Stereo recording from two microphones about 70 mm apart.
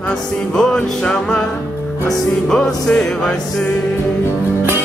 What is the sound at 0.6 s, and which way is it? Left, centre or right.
Music, centre.